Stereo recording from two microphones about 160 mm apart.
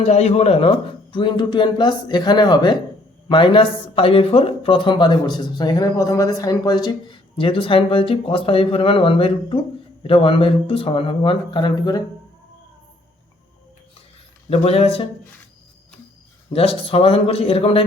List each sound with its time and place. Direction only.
0.0 s speech: 40° left (ahead or behind); by 12.0 s 25° left (ahead or behind)
14.5 s speech: 40° left (ahead or behind)
16.5 s speech: 35° left (ahead or behind)